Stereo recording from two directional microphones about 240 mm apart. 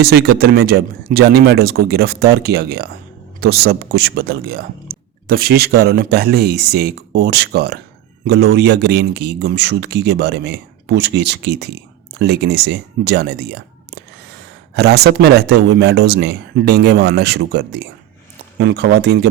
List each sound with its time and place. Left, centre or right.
0.0 s speech: right